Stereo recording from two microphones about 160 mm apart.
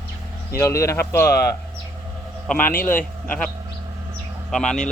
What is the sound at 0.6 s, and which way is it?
Speech, 20° left (ahead or behind).